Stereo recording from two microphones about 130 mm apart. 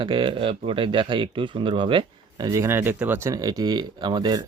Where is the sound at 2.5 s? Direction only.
20° right (ahead or behind).